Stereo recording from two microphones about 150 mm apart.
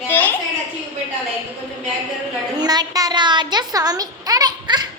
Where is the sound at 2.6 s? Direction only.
25° right (ahead or behind).